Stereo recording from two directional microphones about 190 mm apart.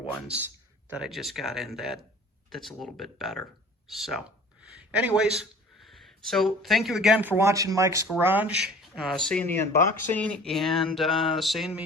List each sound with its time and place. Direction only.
0.0 s speech: 5° right (ahead or behind)
0.9 s music: 5° right (ahead or behind)
4.9 s speech: 5° right (ahead or behind)
8.8 s music: centre (ahead or behind)